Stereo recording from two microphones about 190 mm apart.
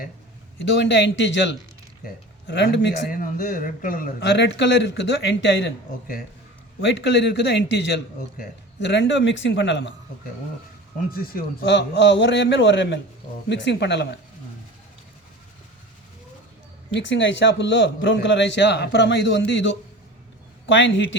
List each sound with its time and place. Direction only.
0.6 s a man's voice: 70° left (ahead or behind)
3.2 s speech: 45° left (ahead or behind)
4.2 s a man's voice: 65° left (ahead or behind)
6.8 s a man's voice: 65° left (ahead or behind)
11.1 s a man's voice: 60° left (ahead or behind)
16.9 s a man's voice: 70° left (ahead or behind)